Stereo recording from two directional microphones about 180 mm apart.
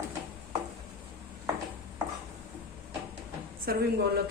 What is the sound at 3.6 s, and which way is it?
Speech, 55° right (ahead or behind).